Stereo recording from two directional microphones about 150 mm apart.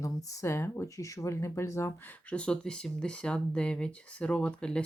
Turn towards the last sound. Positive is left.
turn(degrees=5)  # may be behind; listen again after turning